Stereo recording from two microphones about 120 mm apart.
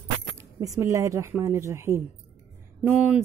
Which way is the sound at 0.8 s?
25° right (ahead or behind).